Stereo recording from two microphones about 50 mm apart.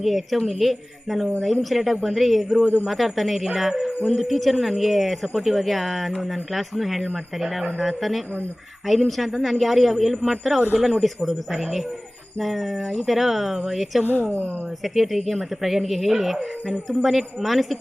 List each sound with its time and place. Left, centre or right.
0.0 s speech: centre
14.0 s speech: right
14.9 s speech: centre